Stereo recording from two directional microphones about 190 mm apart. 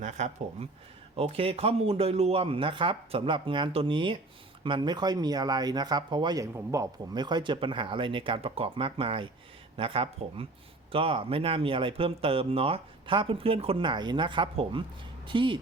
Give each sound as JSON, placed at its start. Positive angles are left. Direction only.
{"t": 0.0, "sound": "speech", "side_deg": -40}